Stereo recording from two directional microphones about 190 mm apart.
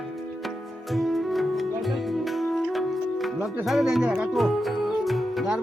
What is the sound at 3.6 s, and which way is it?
Speech, centre (ahead or behind).